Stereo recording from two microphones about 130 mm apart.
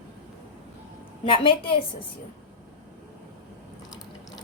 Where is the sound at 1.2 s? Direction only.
40° left (ahead or behind).